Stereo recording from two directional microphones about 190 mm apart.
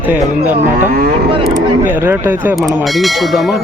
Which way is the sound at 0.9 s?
55° right (ahead or behind).